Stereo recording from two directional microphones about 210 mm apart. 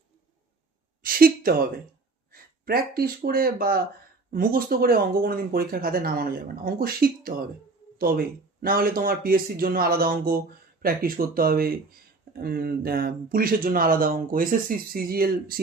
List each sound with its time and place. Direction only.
1.0 s speech: 45° right (ahead or behind)